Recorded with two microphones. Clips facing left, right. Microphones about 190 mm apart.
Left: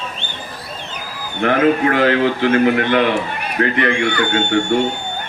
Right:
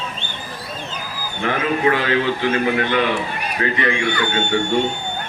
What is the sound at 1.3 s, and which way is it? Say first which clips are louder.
A man's voice: left 7 dB; 55° left (ahead or behind).